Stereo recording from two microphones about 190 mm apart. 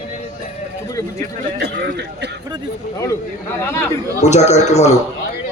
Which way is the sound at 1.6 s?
60° right (ahead or behind).